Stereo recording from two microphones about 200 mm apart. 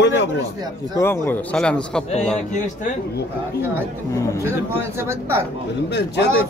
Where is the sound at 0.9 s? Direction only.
10° left (ahead or behind).